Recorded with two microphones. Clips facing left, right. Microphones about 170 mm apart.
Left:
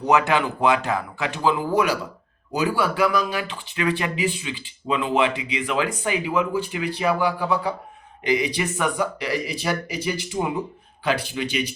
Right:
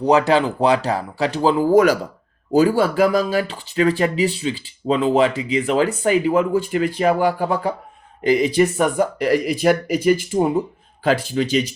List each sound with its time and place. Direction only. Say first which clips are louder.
0.1 s speech: right 4 dB; 35° right (ahead or behind)